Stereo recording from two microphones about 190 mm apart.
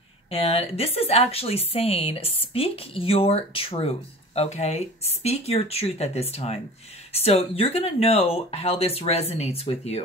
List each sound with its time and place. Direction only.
0.3 s a woman's voice: 30° left (ahead or behind)